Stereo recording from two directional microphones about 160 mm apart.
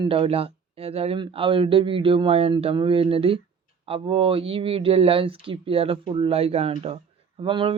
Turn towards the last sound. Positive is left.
turn(degrees=-30)  # may be behind; listen again after turning